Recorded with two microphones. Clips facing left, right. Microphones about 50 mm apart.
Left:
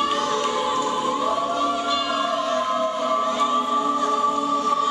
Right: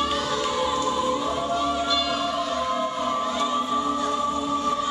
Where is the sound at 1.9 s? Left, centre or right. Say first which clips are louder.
Left 2 dB; left.